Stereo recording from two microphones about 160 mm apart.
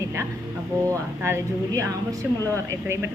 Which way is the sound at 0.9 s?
15° right (ahead or behind).